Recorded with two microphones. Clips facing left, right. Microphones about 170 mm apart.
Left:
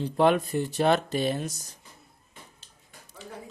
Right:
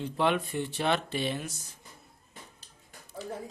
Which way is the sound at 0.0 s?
40° left (ahead or behind).